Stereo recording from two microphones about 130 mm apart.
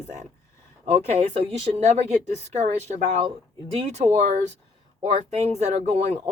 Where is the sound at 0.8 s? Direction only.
55° right (ahead or behind).